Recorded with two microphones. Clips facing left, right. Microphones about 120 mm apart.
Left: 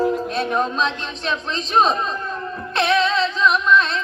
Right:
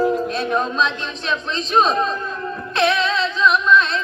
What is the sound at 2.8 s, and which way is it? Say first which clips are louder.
Music: even; 30° left (ahead or behind).